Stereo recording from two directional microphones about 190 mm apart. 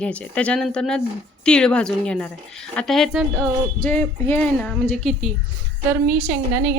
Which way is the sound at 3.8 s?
10° left (ahead or behind).